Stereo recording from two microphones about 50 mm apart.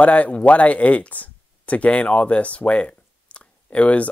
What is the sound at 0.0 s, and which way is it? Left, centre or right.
Speech, left.